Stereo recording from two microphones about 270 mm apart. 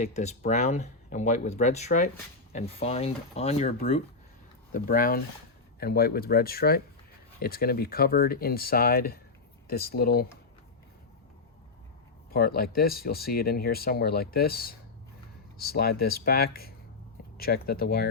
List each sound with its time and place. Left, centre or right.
0.0 s speech: left
12.3 s speech: left